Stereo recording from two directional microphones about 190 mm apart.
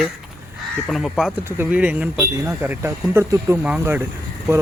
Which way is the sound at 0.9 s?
Centre (ahead or behind).